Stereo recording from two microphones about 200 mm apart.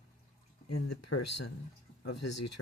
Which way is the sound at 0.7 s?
90° left.